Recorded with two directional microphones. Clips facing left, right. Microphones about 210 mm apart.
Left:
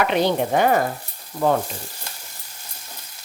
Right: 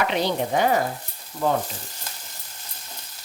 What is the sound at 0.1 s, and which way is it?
Speech, 55° left (ahead or behind).